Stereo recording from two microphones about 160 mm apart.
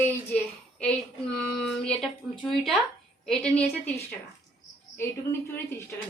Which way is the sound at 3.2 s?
5° left (ahead or behind).